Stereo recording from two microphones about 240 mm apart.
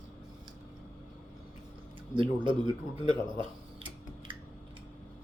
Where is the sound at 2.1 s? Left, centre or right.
Right.